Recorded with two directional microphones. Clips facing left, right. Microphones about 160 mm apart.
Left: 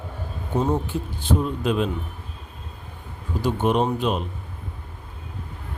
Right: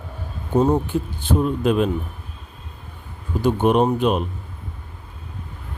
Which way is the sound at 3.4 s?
55° right (ahead or behind).